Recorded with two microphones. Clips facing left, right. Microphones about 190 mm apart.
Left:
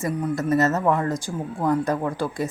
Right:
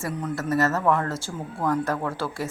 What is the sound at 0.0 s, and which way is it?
Speech, 15° left (ahead or behind).